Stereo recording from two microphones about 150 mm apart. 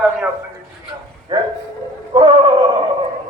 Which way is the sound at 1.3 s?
30° right (ahead or behind).